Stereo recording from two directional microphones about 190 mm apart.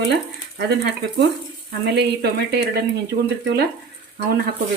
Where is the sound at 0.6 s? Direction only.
65° right (ahead or behind).